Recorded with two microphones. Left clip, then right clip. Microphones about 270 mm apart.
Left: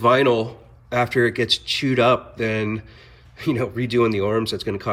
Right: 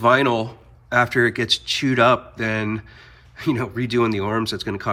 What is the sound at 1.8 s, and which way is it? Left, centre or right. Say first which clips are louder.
Speech: right 1 dB; centre.